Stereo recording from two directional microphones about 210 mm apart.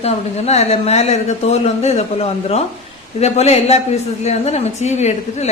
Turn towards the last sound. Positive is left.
turn(degrees=30)  # may be behind; listen again after turning